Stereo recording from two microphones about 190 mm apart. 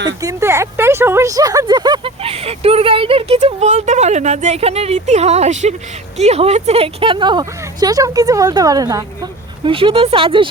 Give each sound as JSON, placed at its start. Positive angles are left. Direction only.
{"t": 0.2, "sound": "speech", "side_deg": -15}